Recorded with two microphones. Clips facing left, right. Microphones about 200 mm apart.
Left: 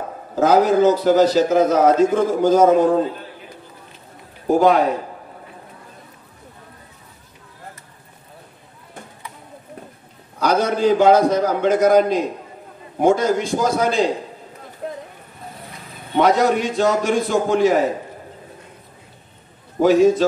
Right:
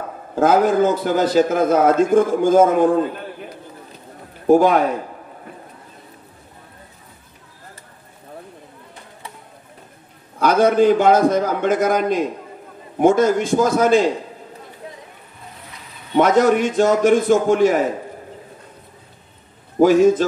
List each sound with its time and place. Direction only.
0.4 s a man's voice: 50° right (ahead or behind)
10.4 s a man's voice: 50° right (ahead or behind)
16.2 s a man's voice: 50° right (ahead or behind)
19.8 s a man's voice: 50° right (ahead or behind)